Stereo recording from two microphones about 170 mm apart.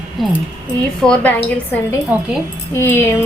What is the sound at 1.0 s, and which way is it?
Speech, 5° left (ahead or behind).